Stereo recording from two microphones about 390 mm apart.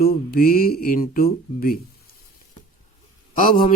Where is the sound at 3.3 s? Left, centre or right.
Centre.